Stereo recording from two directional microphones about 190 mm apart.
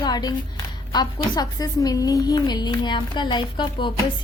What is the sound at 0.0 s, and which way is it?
A woman's voice, 20° left (ahead or behind).